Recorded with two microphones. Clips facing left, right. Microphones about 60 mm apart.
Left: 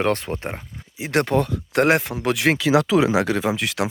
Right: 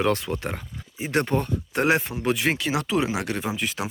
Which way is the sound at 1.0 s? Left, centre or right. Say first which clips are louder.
Left 4 dB; left.